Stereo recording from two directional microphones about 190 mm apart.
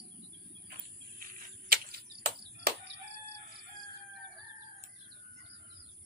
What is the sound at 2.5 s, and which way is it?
Chicken, 60° right (ahead or behind).